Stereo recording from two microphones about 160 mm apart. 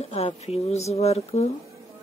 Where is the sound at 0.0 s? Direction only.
40° left (ahead or behind).